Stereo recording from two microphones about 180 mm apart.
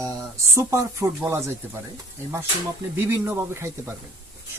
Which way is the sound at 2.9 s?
10° right (ahead or behind).